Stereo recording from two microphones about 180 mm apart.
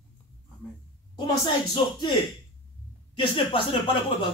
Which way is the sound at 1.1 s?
25° left (ahead or behind).